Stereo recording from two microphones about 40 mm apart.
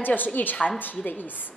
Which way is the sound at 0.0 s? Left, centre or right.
Left.